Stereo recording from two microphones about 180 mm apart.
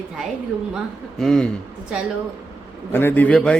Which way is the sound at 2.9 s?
10° left (ahead or behind).